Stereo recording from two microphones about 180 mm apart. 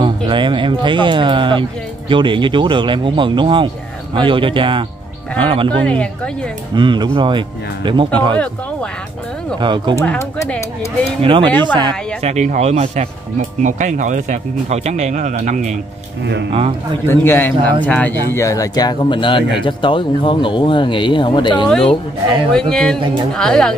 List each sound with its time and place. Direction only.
0.0 s speech: 25° right (ahead or behind)
5.9 s speech: 5° left (ahead or behind)
6.7 s speech: 25° right (ahead or behind)
9.6 s speech: 25° right (ahead or behind)
9.9 s a man's voice: 15° left (ahead or behind)
11.1 s speech: 30° right (ahead or behind); by 15.7 s 45° right (ahead or behind)
17.0 s a man's voice: 15° left (ahead or behind)
21.6 s speech: 5° left (ahead or behind)